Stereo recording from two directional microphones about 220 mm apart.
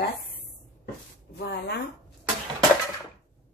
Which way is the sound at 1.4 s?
50° left (ahead or behind).